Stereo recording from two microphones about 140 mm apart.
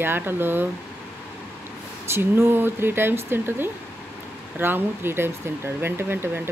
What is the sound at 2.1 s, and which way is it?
Speech, 15° right (ahead or behind).